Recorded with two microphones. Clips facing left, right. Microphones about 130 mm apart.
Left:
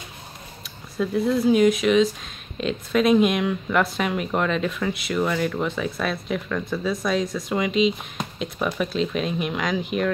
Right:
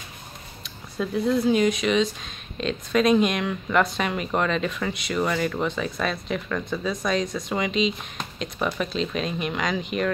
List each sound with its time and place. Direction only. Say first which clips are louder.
0.9 s speech: left 1 dB; centre (ahead or behind)